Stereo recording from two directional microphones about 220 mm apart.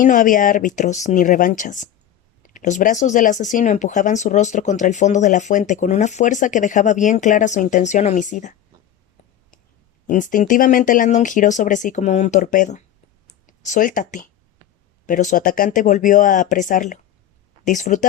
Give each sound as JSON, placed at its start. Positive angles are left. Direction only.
{"t": 0.0, "sound": "speech", "side_deg": 35}
{"t": 10.1, "sound": "speech", "side_deg": 35}